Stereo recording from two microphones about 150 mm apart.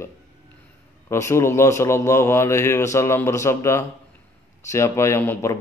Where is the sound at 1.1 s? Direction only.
20° left (ahead or behind).